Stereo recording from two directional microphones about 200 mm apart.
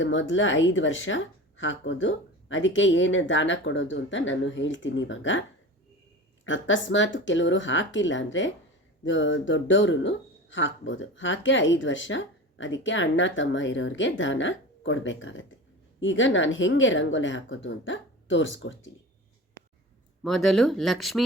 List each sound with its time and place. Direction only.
0.0 s speech: 70° left (ahead or behind)
20.2 s speech: centre (ahead or behind)